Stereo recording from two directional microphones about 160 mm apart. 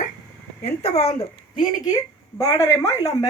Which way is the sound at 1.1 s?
25° left (ahead or behind).